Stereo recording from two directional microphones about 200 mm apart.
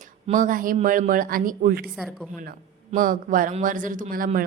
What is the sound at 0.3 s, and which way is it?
A man's voice, 40° right (ahead or behind).